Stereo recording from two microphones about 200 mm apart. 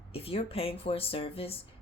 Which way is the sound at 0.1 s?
30° left (ahead or behind).